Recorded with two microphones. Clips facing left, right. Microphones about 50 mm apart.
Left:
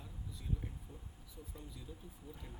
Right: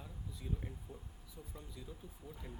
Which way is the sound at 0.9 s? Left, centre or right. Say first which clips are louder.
Right 3 dB; right.